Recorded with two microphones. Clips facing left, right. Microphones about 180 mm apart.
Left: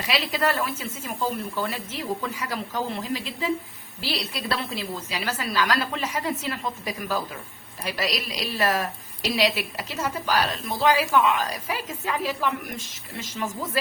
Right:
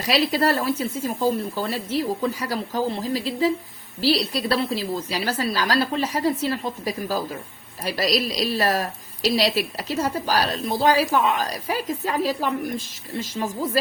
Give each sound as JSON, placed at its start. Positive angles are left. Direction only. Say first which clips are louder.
{"t": 0.0, "sound": "a woman's voice", "louder": "right 5 dB", "side_deg": -35}